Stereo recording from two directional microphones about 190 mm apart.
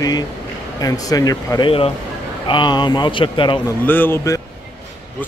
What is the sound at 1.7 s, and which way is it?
Speech, 30° left (ahead or behind).